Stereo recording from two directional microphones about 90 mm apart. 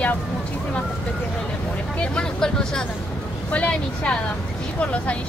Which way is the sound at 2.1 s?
10° left (ahead or behind).